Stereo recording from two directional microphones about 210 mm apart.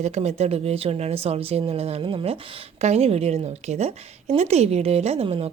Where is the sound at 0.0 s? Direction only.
30° right (ahead or behind).